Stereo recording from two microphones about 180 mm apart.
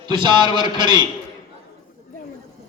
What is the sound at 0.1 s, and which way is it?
Speech, 25° right (ahead or behind).